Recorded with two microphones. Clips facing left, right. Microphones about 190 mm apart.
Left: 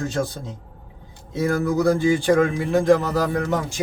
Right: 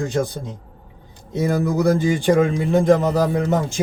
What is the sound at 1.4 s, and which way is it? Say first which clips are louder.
Speech: right 1 dB; 20° right (ahead or behind).